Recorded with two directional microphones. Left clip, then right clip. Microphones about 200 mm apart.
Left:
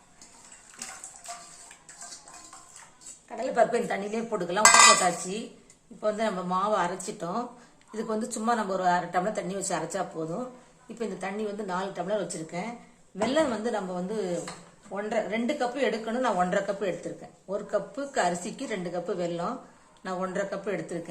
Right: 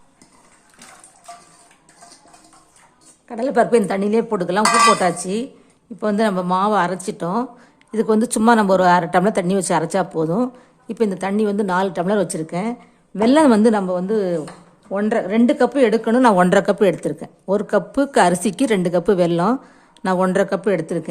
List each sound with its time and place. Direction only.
3.2 s a woman's voice: 55° right (ahead or behind)
6.0 s a woman's voice: 50° right (ahead or behind)